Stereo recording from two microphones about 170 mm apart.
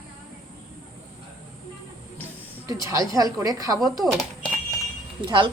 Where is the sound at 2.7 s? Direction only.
20° right (ahead or behind).